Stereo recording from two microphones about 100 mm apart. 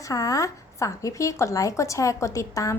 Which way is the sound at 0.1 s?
35° left (ahead or behind).